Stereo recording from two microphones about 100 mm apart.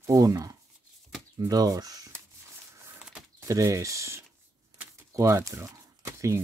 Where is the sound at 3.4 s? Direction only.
30° right (ahead or behind).